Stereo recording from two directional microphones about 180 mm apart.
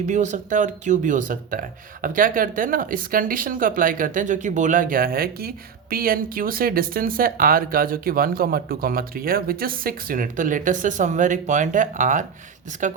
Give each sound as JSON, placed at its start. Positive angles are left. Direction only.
{"t": 0.1, "sound": "speech", "side_deg": -40}